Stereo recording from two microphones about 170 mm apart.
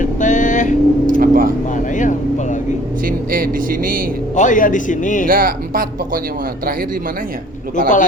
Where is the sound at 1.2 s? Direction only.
55° right (ahead or behind).